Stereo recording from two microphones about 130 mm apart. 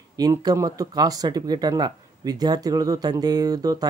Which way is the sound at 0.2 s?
25° right (ahead or behind).